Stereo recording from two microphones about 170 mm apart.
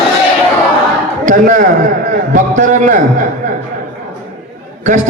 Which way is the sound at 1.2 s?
50° right (ahead or behind).